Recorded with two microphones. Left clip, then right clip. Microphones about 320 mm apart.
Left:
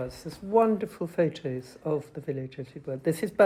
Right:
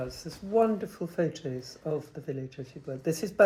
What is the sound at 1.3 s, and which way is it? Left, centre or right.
Speech, centre.